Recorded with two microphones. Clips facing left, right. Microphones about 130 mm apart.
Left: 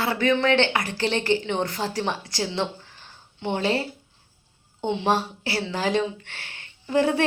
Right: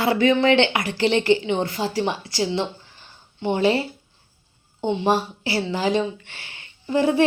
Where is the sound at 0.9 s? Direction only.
45° left (ahead or behind).